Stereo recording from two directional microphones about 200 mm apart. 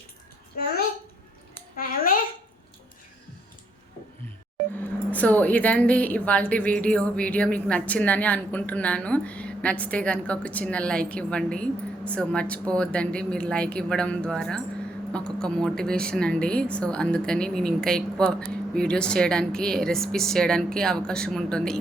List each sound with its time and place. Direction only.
0.5 s a child's voice: 50° left (ahead or behind)
1.7 s a sound: 45° left (ahead or behind)
4.8 s a woman's voice: 10° left (ahead or behind)